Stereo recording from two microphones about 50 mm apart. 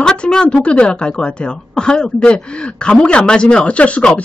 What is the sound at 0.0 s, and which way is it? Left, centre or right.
Speech, centre.